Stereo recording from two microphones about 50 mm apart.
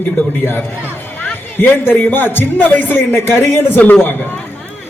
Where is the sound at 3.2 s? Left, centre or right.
Left.